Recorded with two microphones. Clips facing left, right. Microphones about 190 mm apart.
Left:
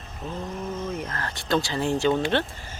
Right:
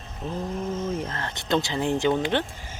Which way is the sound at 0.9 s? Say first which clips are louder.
Right 1 dB; 25° right (ahead or behind).